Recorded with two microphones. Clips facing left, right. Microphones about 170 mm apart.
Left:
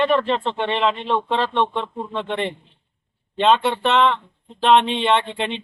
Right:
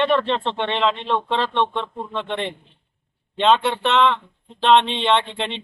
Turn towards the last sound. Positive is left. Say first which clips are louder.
# even
turn(degrees=5)  # may be behind; listen again after turning